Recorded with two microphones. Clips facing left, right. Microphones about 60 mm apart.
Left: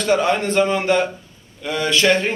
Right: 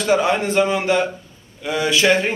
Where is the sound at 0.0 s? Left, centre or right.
Centre.